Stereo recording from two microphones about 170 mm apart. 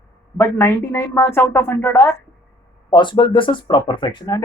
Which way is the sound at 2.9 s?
25° left (ahead or behind).